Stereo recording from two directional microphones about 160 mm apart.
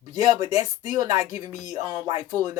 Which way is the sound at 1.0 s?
25° right (ahead or behind).